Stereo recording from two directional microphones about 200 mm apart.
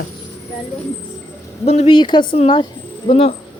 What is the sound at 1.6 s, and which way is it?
Speech, 30° left (ahead or behind).